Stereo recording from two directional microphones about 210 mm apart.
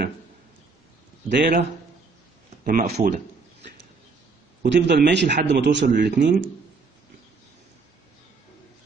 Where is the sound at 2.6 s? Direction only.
40° right (ahead or behind).